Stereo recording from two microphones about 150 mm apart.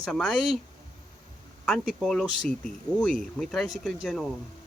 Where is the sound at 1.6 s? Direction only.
5° left (ahead or behind).